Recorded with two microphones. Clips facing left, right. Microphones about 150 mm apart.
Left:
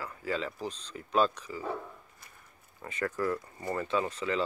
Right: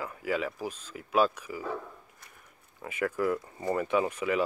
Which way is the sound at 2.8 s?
10° right (ahead or behind).